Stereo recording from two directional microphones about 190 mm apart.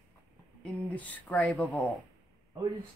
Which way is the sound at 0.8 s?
10° left (ahead or behind).